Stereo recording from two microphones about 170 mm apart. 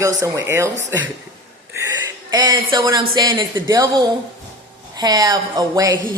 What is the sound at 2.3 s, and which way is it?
Speech, 25° right (ahead or behind).